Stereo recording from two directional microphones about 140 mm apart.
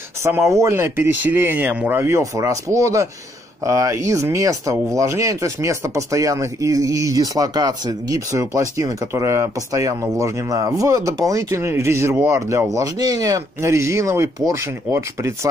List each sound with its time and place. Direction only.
0.2 s speech: 20° right (ahead or behind)